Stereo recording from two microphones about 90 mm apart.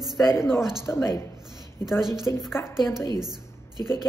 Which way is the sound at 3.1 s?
50° right (ahead or behind).